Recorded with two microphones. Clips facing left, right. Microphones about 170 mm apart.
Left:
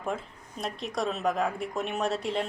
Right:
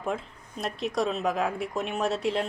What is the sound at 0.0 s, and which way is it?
Speech, centre (ahead or behind).